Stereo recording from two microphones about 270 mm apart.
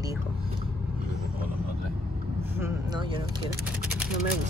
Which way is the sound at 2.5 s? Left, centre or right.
Centre.